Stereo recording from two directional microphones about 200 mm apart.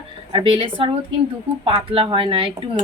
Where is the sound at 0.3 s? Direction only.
25° right (ahead or behind).